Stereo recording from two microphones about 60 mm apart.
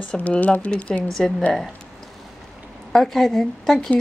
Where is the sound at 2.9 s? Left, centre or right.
Centre.